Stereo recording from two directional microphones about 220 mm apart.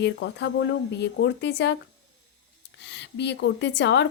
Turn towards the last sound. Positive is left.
turn(degrees=55)  # may be behind; listen again after turning